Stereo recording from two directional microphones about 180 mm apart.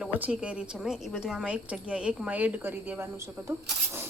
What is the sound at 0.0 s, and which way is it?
Speech, 10° right (ahead or behind).